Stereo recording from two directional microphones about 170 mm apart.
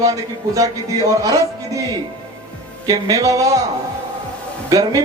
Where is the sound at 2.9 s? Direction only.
20° right (ahead or behind).